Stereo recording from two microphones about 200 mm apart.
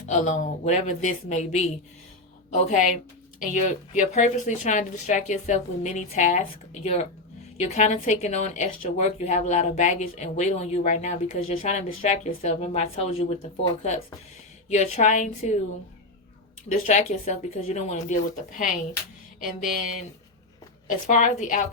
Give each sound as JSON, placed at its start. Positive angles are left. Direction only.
{"t": 0.1, "sound": "a woman's voice", "side_deg": 40}
{"t": 16.6, "sound": "a woman's voice", "side_deg": 35}
{"t": 20.8, "sound": "a woman's voice", "side_deg": 35}